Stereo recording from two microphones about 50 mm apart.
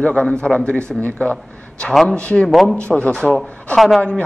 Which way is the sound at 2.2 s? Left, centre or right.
Left.